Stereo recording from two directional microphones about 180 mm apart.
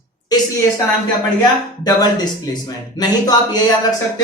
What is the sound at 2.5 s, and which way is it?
Speech, 20° left (ahead or behind).